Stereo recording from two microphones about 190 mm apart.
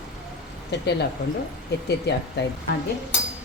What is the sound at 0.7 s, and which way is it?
Speech, 60° left (ahead or behind).